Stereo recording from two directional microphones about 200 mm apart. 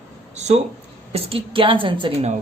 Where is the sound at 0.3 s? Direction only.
35° right (ahead or behind).